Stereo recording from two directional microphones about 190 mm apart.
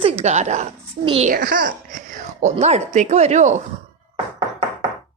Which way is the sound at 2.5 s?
35° right (ahead or behind).